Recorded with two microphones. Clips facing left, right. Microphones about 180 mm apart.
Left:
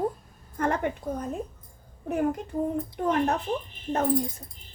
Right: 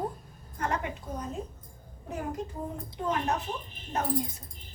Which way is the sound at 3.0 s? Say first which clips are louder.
Left 5 dB; 60° left (ahead or behind).